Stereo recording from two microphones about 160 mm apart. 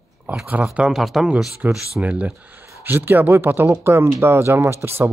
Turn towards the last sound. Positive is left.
turn(degrees=-15)  # may be behind; listen again after turning